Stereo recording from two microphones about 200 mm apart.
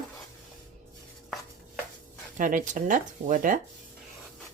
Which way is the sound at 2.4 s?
40° right (ahead or behind).